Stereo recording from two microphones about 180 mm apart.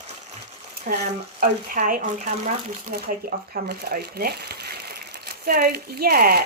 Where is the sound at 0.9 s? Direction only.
45° right (ahead or behind).